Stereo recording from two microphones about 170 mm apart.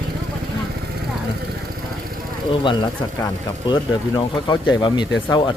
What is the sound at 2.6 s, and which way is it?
Speech, 25° left (ahead or behind).